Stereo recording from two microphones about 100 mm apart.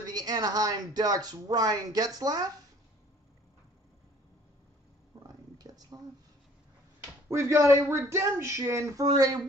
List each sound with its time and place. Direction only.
0.0 s speech: 40° right (ahead or behind)
5.2 s a sound: 40° right (ahead or behind)
7.2 s speech: 30° right (ahead or behind)